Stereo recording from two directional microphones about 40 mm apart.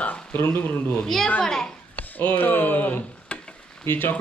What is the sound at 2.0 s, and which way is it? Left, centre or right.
Speech, left.